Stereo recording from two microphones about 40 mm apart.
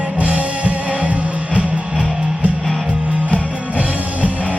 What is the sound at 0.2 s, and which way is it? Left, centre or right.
Music, right.